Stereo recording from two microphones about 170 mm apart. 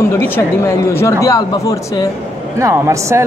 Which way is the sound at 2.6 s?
20° right (ahead or behind).